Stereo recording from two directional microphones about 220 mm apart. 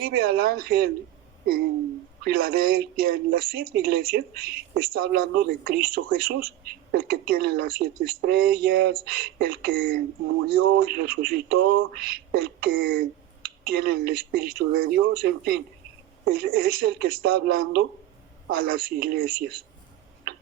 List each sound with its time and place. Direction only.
0.0 s speech: 45° right (ahead or behind)
2.2 s speech: 45° right (ahead or behind)